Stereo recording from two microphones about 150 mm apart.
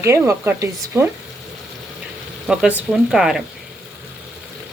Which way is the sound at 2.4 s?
5° right (ahead or behind).